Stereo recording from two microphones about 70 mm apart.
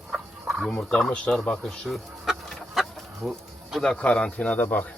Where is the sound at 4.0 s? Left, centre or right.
Centre.